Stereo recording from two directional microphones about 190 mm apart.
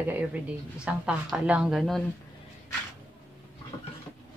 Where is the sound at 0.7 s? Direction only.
5° right (ahead or behind).